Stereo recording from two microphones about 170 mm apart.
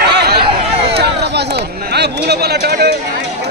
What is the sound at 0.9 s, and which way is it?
Chatter, 80° right.